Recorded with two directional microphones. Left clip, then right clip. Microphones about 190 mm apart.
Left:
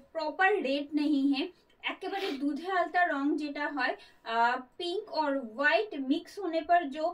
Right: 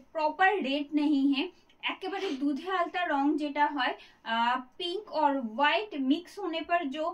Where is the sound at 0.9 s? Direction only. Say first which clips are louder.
Right 4 dB; 10° right (ahead or behind).